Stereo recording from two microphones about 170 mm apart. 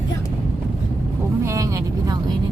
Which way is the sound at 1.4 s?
20° right (ahead or behind).